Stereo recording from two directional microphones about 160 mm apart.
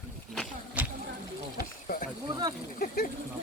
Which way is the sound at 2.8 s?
75° left (ahead or behind).